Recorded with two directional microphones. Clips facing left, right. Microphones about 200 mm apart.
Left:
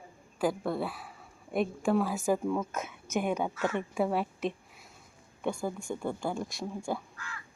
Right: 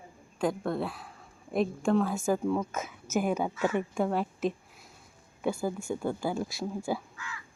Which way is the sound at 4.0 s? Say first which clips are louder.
Right 1 dB; 5° left (ahead or behind).